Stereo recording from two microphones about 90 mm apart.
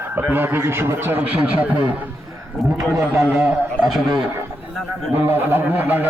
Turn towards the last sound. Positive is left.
turn(degrees=-20)  # may be behind; listen again after turning